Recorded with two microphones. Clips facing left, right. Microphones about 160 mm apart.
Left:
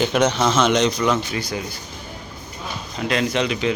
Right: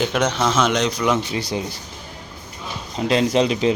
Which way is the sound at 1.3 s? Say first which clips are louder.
Right 2 dB; 25° right (ahead or behind).